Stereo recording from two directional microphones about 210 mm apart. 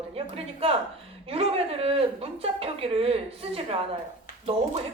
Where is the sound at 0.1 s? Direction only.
25° right (ahead or behind).